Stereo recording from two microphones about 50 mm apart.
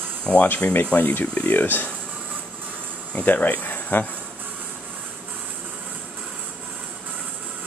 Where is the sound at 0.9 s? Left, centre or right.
Left.